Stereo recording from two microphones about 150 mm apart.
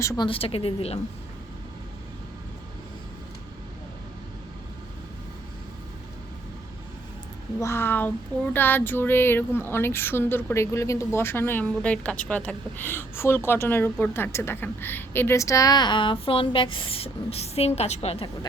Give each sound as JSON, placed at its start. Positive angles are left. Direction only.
{"t": 0.0, "sound": "speech", "side_deg": 20}
{"t": 0.3, "sound": "a woman's voice", "side_deg": 40}
{"t": 7.6, "sound": "a woman's voice", "side_deg": 15}